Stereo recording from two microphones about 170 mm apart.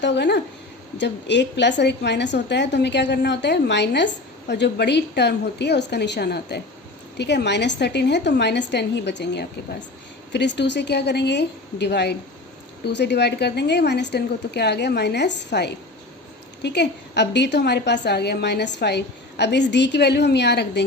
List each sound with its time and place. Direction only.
0.0 s a woman's voice: 85° left
7.2 s a woman's voice: 85° left